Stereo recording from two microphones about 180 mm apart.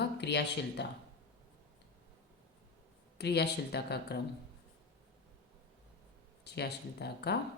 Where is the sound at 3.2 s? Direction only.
65° left (ahead or behind).